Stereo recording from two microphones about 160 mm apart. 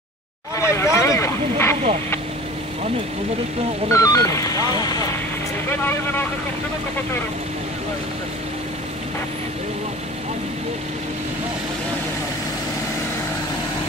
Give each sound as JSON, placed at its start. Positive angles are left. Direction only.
{"t": 0.6, "sound": "speech", "side_deg": 15}
{"t": 3.9, "sound": "speech", "side_deg": 20}
{"t": 5.7, "sound": "speech", "side_deg": 15}